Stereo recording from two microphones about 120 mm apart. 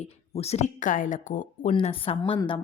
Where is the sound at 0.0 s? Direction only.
65° left (ahead or behind); by 1.7 s 90° left.